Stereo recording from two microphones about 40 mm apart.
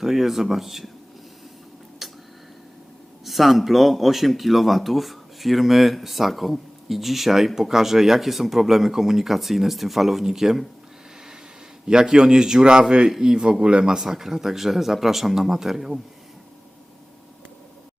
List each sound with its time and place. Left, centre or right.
0.0 s speech: centre
2.0 s tick-tock: centre
3.2 s speech: centre
11.9 s a man's voice: centre